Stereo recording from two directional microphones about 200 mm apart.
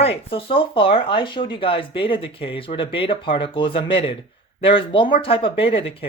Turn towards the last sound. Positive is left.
turn(degrees=30)  # may be behind; listen again after turning